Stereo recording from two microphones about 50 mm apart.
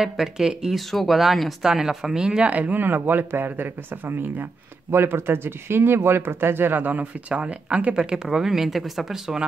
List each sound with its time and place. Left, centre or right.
0.0 s speech: centre
0.7 s speech: centre
2.5 s speech: right
4.9 s speech: right; by 9.5 s centre